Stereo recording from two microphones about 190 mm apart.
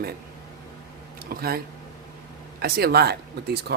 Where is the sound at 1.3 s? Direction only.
55° right (ahead or behind).